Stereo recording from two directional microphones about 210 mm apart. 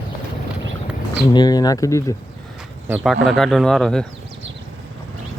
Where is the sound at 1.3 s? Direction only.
20° left (ahead or behind).